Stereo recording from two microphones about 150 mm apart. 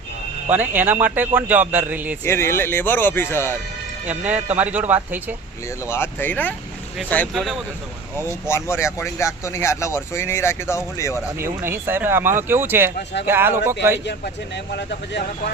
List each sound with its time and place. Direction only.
0.5 s speech: 10° right (ahead or behind)
2.2 s speech: 15° left (ahead or behind)
4.3 s speech: 10° right (ahead or behind)
5.8 s speech: 15° left (ahead or behind)
8.4 s speech: 20° left (ahead or behind)
11.3 s speech: 15° right (ahead or behind)
14.7 s speech: 90° left